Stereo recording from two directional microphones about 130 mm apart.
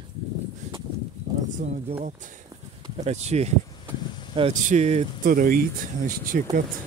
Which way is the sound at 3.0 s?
55° right (ahead or behind).